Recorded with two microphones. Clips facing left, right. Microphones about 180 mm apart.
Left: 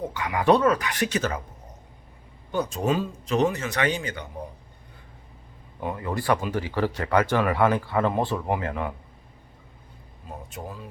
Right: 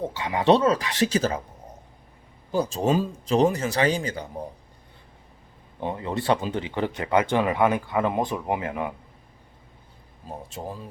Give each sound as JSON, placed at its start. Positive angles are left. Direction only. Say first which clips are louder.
{"t": 0.0, "sound": "speech", "louder": "right 1 dB", "side_deg": -25}
{"t": 2.5, "sound": "speech", "louder": "right 2 dB", "side_deg": -30}
{"t": 5.8, "sound": "speech", "louder": "right 1 dB", "side_deg": -25}
{"t": 10.2, "sound": "speech", "louder": "right 3 dB", "side_deg": -35}